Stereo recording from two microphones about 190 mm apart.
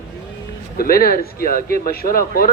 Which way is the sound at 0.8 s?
50° left (ahead or behind).